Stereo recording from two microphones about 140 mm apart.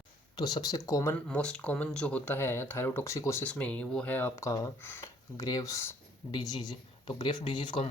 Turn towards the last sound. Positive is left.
turn(degrees=35)  # may be behind; listen again after turning